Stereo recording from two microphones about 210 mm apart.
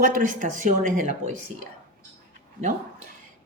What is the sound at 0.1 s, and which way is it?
Speech, 40° right (ahead or behind).